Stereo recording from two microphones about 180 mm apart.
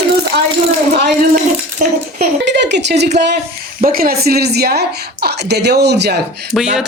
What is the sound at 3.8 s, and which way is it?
A woman's voice, 55° right (ahead or behind).